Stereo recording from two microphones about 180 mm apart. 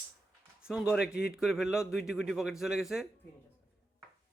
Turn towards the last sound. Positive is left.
turn(degrees=-5)  # may be behind; listen again after turning